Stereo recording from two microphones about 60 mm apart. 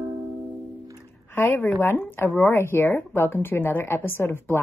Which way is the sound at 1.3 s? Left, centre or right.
Left.